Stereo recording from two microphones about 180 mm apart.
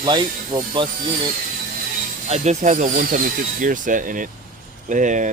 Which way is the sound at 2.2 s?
40° right (ahead or behind).